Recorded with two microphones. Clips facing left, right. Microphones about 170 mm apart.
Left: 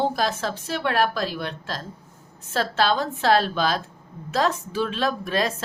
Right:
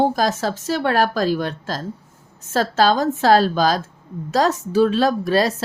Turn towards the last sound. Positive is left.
turn(degrees=-35)  # may be behind; listen again after turning